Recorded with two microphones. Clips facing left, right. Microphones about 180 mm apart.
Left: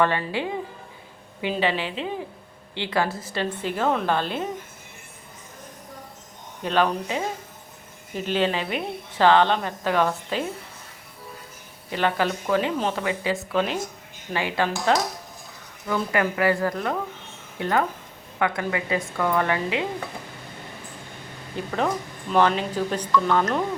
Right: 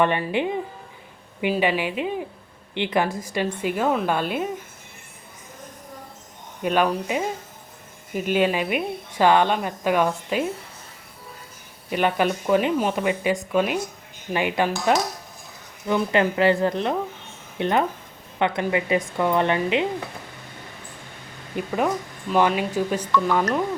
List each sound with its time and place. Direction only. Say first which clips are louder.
0.0 s a woman's voice: right 2 dB; 20° right (ahead or behind)
6.6 s speech: right 1 dB; 10° right (ahead or behind)
11.9 s a woman's voice: right 2 dB; 15° right (ahead or behind)
21.5 s speech: right 2 dB; 5° right (ahead or behind)